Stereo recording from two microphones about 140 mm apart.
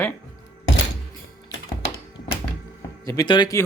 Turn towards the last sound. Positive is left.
turn(degrees=35)  # may be behind; listen again after turning